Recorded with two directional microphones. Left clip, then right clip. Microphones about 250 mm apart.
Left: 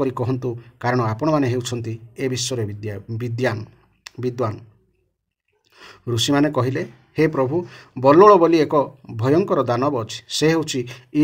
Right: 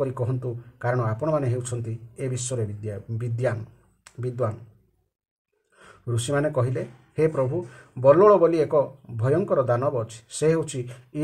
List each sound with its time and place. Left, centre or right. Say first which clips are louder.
0.0 s speech: left 5 dB; left
5.8 s speech: left 10 dB; left